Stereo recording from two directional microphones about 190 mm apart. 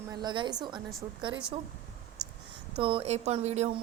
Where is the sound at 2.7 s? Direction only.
25° right (ahead or behind).